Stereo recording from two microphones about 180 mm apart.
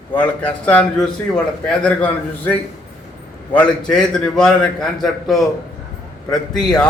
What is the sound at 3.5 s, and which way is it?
A man's voice, 5° left (ahead or behind).